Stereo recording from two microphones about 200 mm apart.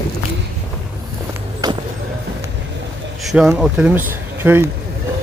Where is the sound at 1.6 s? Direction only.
20° right (ahead or behind).